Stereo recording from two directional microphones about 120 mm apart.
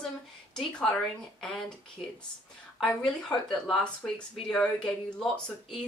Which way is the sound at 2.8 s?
5° left (ahead or behind).